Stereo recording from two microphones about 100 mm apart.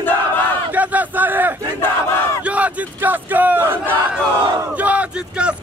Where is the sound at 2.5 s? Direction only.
15° right (ahead or behind).